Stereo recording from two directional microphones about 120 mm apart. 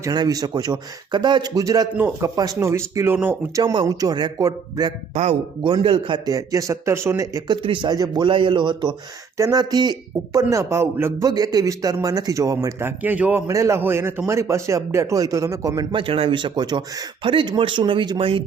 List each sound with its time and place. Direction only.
0.0 s speech: 30° right (ahead or behind)
2.0 s a man's voice: 15° right (ahead or behind)
2.3 s speech: 30° right (ahead or behind)
3.5 s speech: 35° right (ahead or behind)
5.1 s speech: 60° right (ahead or behind)
5.6 s speech: 45° right (ahead or behind)
6.2 s speech: 30° right (ahead or behind)
7.5 s speech: 45° right (ahead or behind); by 11.1 s 20° right (ahead or behind)
11.2 s speech: 30° right (ahead or behind)
13.0 s a man's voice: 15° right (ahead or behind)
13.5 s speech: 25° right (ahead or behind)
16.0 s speech: 50° right (ahead or behind)